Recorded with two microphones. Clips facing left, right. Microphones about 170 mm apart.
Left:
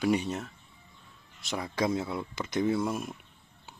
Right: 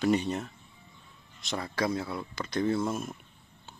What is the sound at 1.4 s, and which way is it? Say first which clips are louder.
Speech: even; 10° left (ahead or behind).